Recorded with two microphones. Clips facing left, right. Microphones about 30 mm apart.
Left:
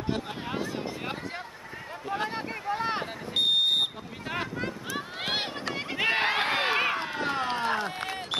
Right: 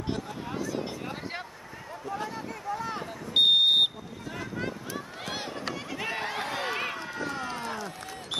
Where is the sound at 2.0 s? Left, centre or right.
Left.